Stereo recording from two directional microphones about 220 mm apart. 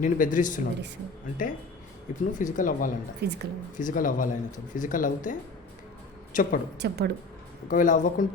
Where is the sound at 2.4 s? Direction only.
35° left (ahead or behind).